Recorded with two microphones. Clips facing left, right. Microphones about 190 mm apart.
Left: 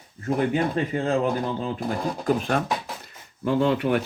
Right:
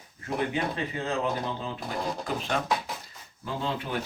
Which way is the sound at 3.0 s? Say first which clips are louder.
Left 12 dB; 70° left (ahead or behind).